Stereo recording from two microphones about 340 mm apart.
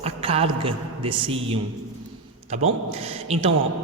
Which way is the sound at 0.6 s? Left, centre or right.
Centre.